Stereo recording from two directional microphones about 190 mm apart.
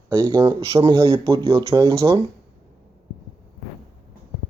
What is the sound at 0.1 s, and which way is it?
Speech, 20° right (ahead or behind).